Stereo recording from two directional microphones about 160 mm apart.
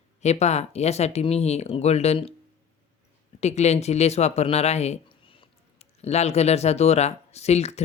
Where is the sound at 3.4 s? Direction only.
45° left (ahead or behind).